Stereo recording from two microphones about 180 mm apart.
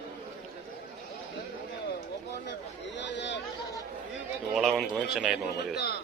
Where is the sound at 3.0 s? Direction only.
75° left (ahead or behind).